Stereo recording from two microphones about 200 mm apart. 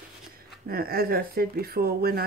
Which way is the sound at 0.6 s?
50° right (ahead or behind).